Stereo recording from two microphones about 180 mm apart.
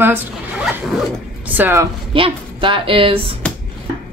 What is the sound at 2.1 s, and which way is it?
Speech, 30° right (ahead or behind).